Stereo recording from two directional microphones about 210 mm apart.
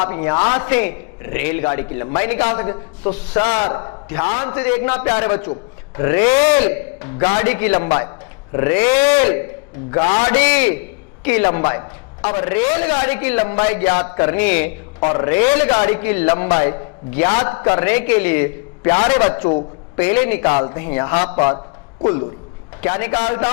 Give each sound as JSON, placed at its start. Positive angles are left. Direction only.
{"t": 0.0, "sound": "a man's voice", "side_deg": 15}
{"t": 3.3, "sound": "a man's voice", "side_deg": 25}
{"t": 13.4, "sound": "a man's voice", "side_deg": 25}
{"t": 14.0, "sound": "a man's voice", "side_deg": 15}
{"t": 20.4, "sound": "a man's voice", "side_deg": 30}
{"t": 20.7, "sound": "a man's voice", "side_deg": 15}
{"t": 21.3, "sound": "a man's voice", "side_deg": 30}
{"t": 22.8, "sound": "a man's voice", "side_deg": 15}